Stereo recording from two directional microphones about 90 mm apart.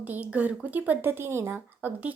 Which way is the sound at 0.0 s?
15° right (ahead or behind).